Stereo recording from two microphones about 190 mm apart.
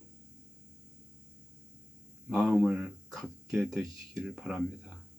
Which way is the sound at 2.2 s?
5° right (ahead or behind).